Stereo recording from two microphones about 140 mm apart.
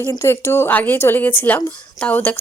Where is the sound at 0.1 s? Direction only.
20° left (ahead or behind).